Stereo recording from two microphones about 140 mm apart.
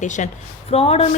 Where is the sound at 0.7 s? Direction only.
45° left (ahead or behind).